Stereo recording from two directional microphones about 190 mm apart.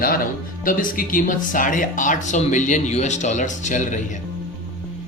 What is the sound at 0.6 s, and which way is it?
Speech, 45° left (ahead or behind).